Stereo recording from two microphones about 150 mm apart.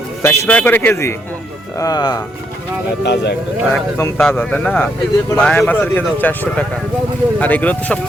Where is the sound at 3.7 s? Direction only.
15° left (ahead or behind).